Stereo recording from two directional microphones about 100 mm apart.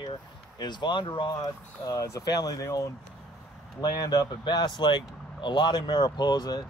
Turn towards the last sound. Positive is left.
turn(degrees=45)  # may be behind; listen again after turning